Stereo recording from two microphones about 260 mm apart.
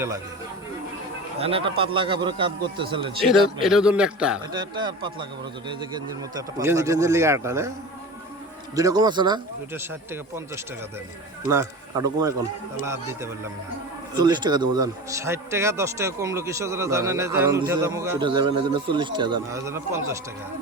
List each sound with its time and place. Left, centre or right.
1.4 s speech: right
3.2 s a man's voice: centre
4.5 s speech: centre
6.6 s speech: centre
8.7 s speech: centre